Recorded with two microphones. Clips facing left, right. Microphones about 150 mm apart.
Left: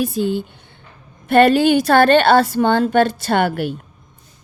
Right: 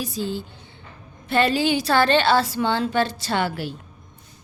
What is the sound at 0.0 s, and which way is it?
Speech, 60° left (ahead or behind).